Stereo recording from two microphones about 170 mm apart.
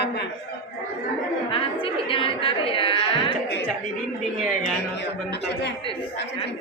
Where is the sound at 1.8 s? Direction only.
30° left (ahead or behind).